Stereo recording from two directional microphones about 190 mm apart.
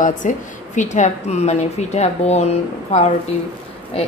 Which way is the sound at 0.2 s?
45° left (ahead or behind).